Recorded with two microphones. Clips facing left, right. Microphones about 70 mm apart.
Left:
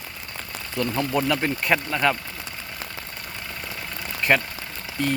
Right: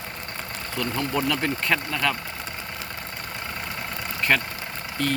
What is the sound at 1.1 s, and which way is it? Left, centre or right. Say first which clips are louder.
Speech: left 1 dB; centre.